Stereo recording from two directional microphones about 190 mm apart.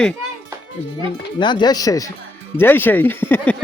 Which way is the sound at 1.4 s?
25° left (ahead or behind).